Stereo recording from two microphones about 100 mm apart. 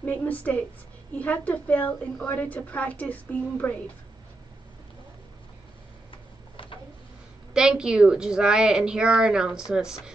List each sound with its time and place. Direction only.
0.0 s a woman's voice: 20° left (ahead or behind)
6.5 s a sound: 60° left (ahead or behind)
7.5 s a woman's voice: 10° right (ahead or behind)